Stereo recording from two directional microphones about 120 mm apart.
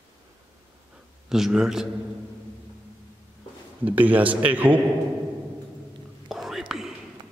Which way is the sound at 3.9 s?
15° right (ahead or behind).